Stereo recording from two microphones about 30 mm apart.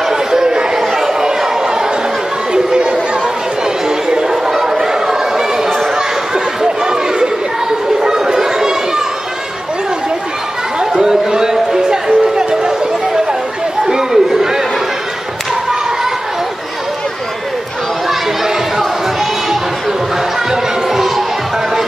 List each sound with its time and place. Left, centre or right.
0.1 s chatter: centre
0.7 s chatter: centre
2.5 s chatter: right
4.3 s chatter: centre
8.0 s a sound: centre
10.8 s music: centre
13.8 s chatter: centre
18.0 s a sound: centre